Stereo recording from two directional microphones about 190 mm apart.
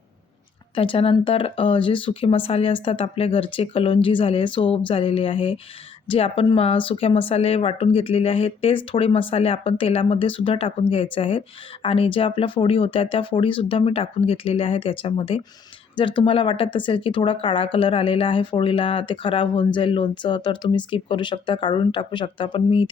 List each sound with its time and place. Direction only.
0.8 s speech: 30° left (ahead or behind)